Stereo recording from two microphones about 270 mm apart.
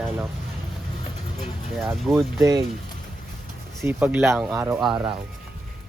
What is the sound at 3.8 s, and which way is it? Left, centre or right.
Speech, centre.